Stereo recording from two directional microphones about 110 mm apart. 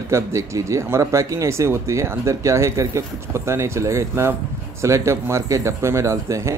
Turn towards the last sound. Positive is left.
turn(degrees=-25)  # may be behind; listen again after turning